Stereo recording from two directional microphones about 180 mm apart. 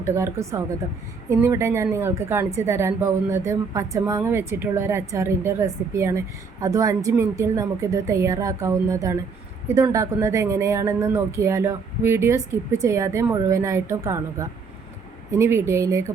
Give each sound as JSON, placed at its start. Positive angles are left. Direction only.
{"t": 0.0, "sound": "a woman's voice", "side_deg": -15}